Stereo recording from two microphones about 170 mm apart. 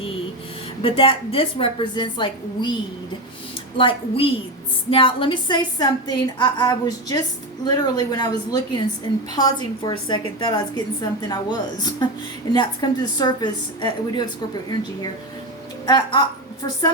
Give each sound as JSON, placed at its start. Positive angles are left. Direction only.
{"t": 0.8, "sound": "a woman's voice", "side_deg": 35}
{"t": 3.8, "sound": "a woman's voice", "side_deg": 30}